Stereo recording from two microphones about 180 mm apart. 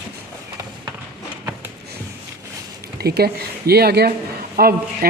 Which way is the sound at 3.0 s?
60° right (ahead or behind).